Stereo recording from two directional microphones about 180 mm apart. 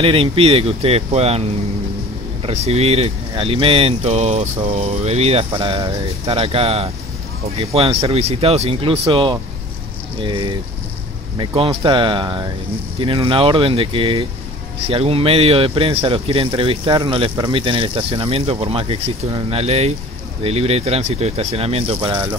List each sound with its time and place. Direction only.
0.0 s speech: 30° right (ahead or behind)
2.4 s speech: 35° right (ahead or behind)